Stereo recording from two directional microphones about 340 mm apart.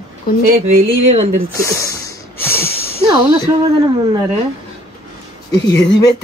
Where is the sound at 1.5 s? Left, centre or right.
Centre.